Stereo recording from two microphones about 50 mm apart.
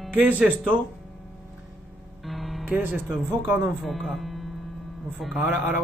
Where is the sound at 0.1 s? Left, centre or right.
Right.